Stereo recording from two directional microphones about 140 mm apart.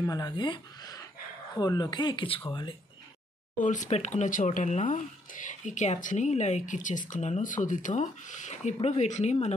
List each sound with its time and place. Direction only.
0.0 s speech: 25° left (ahead or behind)
3.5 s speech: 65° left (ahead or behind)